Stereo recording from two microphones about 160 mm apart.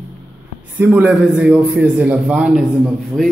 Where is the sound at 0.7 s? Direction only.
10° right (ahead or behind).